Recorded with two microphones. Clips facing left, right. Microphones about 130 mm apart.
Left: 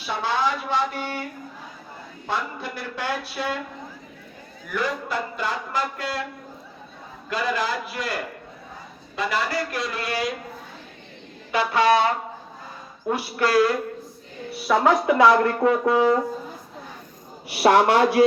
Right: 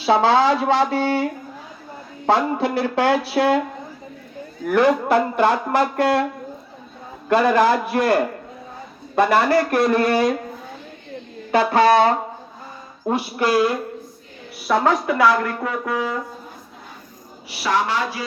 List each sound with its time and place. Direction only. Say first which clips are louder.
0.0 s speech: right 9 dB; 85° right
2.2 s speech: right 11 dB; 75° right (ahead or behind)
4.6 s speech: right 11 dB; 65° right (ahead or behind)
7.3 s speech: right 10 dB; 60° right (ahead or behind)
11.5 s speech: right 4 dB; 40° right (ahead or behind)
13.1 s speech: right 3 dB; 25° right (ahead or behind)
14.7 s a woman's voice: right 1 dB; centre (ahead or behind)
15.0 s speech: left 1 dB; 20° left (ahead or behind)
17.5 s a man's voice: left 5 dB; 55° left (ahead or behind)